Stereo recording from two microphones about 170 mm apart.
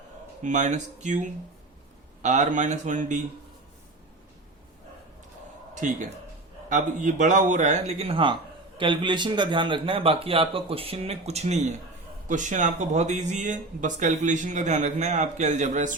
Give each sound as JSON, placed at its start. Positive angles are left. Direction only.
{"t": 0.4, "sound": "speech", "side_deg": -45}
{"t": 5.7, "sound": "a man's voice", "side_deg": -45}